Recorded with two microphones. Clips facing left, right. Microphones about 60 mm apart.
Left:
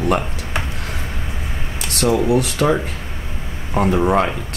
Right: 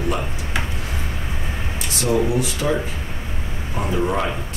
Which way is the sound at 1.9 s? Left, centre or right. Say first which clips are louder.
Left 4 dB; left.